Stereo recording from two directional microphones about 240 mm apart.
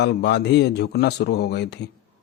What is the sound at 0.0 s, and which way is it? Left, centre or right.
Speech, left.